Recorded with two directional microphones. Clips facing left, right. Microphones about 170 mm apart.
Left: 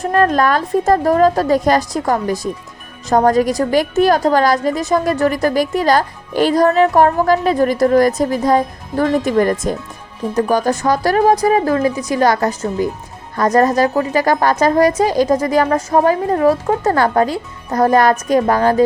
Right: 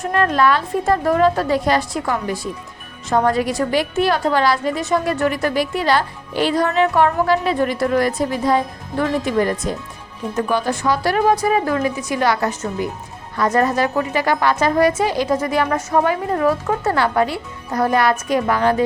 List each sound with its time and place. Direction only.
0.0 s a woman's voice: 40° left (ahead or behind)